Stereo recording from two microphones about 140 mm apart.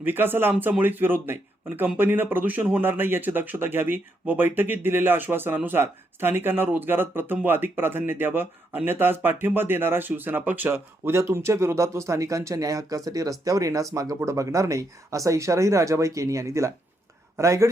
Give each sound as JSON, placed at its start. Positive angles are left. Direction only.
{"t": 0.0, "sound": "a man's voice", "side_deg": -15}